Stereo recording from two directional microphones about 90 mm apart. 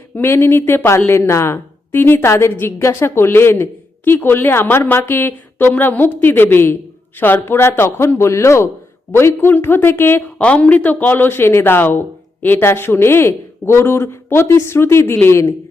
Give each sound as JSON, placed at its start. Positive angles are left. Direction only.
{"t": 0.2, "sound": "a woman's voice", "side_deg": 25}
{"t": 10.3, "sound": "a woman's voice", "side_deg": 15}